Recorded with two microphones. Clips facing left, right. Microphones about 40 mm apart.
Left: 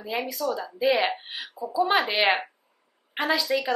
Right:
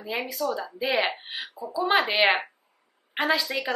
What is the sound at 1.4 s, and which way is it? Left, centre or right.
Speech, right.